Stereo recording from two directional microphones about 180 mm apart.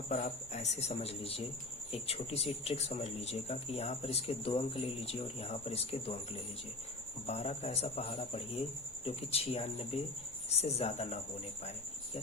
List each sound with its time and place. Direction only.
0.1 s speech: 40° left (ahead or behind)